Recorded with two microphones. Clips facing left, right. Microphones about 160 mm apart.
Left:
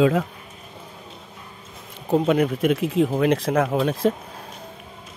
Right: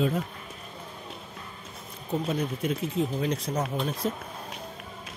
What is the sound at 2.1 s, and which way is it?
Speech, 65° left (ahead or behind).